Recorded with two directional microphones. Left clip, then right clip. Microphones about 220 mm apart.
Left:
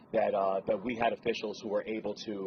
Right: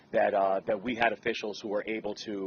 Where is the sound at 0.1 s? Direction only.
40° right (ahead or behind).